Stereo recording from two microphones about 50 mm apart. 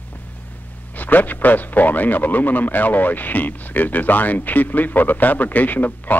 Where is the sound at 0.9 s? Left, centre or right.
Left.